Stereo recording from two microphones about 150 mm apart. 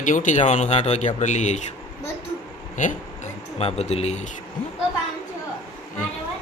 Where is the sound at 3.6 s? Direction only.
45° left (ahead or behind).